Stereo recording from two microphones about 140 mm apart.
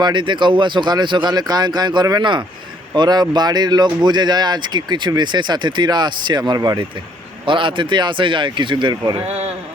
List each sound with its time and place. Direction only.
0.0 s speech: 35° right (ahead or behind)